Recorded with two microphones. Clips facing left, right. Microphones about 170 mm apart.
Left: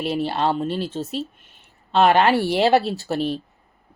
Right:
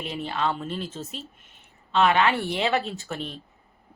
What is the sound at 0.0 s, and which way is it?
Speech, 75° left (ahead or behind).